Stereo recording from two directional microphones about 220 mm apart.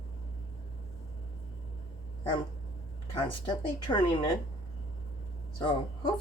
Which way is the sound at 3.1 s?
20° left (ahead or behind).